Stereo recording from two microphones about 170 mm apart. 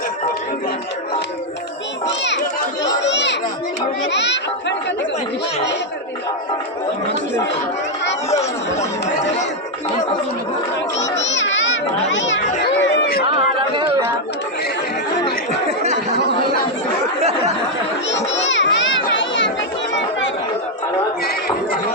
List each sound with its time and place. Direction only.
3.0 s children playing: 90° left
4.0 s a child's voice: 90° left
11.1 s children playing: 90° left
12.8 s chatter: 85° left
18.1 s children playing: 90° left